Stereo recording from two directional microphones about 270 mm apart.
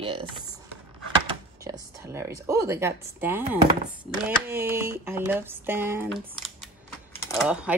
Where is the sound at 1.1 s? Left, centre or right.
Centre.